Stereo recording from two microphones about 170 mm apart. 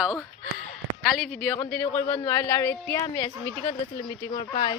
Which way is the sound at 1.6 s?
15° left (ahead or behind).